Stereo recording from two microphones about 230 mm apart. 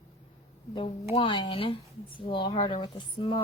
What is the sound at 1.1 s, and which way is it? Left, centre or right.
Speech, left.